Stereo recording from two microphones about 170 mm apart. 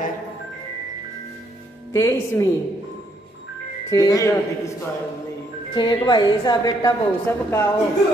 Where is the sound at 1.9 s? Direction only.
20° left (ahead or behind).